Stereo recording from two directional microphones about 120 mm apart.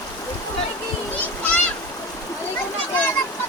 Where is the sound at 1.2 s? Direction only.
15° left (ahead or behind).